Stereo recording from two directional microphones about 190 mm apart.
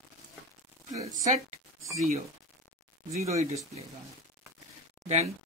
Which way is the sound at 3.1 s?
35° right (ahead or behind).